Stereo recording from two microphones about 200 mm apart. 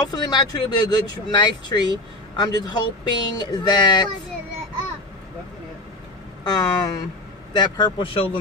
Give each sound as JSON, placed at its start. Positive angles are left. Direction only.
{"t": 0.0, "sound": "speech", "side_deg": 20}
{"t": 6.4, "sound": "speech", "side_deg": 20}